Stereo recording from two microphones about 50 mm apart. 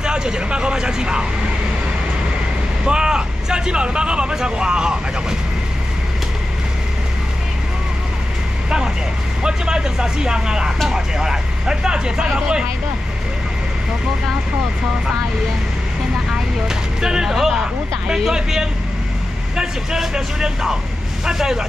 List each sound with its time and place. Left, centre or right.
0.0 s speech: centre
2.8 s speech: centre
8.6 s speech: centre
16.3 s speech: centre